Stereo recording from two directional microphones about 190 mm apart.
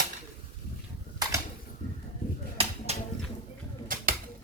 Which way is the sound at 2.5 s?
30° right (ahead or behind).